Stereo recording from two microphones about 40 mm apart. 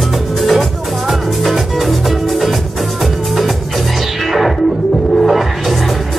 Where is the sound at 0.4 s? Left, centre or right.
Centre.